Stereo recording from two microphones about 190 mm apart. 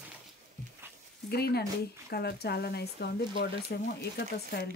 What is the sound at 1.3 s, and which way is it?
Speech, 55° left (ahead or behind).